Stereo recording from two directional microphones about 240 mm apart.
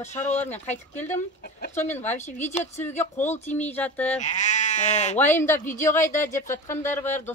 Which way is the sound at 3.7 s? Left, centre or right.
Centre.